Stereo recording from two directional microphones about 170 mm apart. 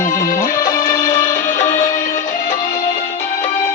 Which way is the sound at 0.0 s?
50° left (ahead or behind).